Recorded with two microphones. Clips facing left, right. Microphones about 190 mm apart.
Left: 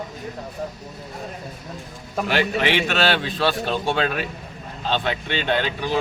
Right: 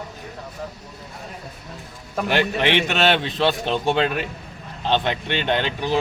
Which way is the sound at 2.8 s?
20° right (ahead or behind).